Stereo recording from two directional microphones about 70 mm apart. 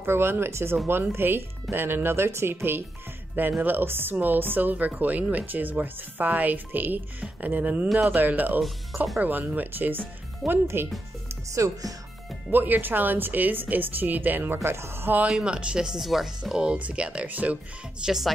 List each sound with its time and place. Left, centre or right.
0.0 s speech: right
11.5 s speech: right
12.4 s speech: right
15.2 s speech: centre
16.6 s speech: centre
18.0 s speech: centre